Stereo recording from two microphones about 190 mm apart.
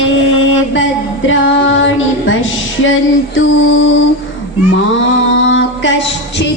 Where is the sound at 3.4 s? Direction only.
85° left.